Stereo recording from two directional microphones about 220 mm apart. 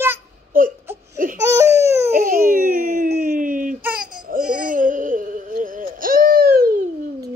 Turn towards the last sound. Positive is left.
turn(degrees=-40)  # may be behind; listen again after turning